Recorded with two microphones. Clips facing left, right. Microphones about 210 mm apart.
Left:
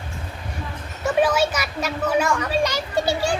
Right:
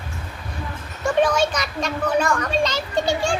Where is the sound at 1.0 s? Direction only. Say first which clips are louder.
Even; 5° left (ahead or behind).